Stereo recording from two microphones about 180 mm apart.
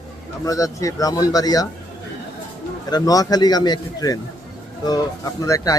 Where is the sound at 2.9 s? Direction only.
20° left (ahead or behind).